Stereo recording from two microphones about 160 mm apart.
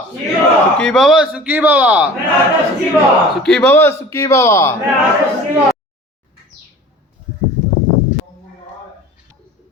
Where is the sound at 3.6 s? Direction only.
15° left (ahead or behind).